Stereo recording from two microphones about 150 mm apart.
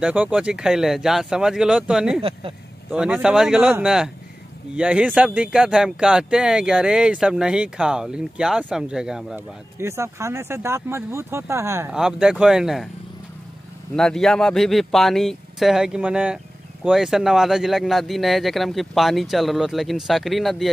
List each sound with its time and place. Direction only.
0.0 s speech: 10° right (ahead or behind)
9.8 s speech: 20° right (ahead or behind)
11.9 s speech: 5° right (ahead or behind)
13.9 s speech: 5° left (ahead or behind)